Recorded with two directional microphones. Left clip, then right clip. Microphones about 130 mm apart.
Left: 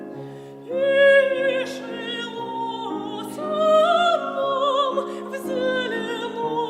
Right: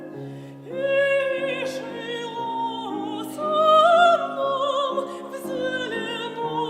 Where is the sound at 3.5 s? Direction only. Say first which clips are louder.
Right 1 dB; 55° left (ahead or behind).